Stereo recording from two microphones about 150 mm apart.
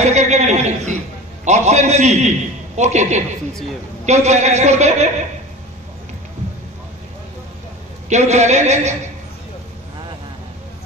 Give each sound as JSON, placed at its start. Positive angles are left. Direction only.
{"t": 0.0, "sound": "a man's voice", "side_deg": -50}
{"t": 8.1, "sound": "a man's voice", "side_deg": -50}